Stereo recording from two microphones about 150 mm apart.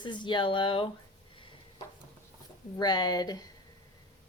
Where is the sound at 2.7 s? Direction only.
30° left (ahead or behind).